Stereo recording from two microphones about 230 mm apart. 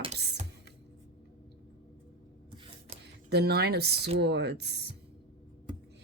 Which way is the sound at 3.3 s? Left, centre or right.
Right.